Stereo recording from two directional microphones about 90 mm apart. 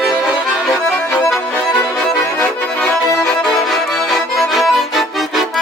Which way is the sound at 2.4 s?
5° left (ahead or behind).